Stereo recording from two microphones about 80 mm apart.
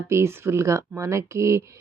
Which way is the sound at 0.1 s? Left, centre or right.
Right.